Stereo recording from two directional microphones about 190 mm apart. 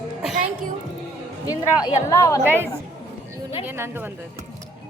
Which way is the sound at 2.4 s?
10° right (ahead or behind).